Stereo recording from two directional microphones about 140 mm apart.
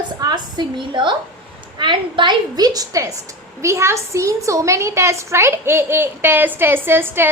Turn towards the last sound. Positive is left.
turn(degrees=-15)  # may be behind; listen again after turning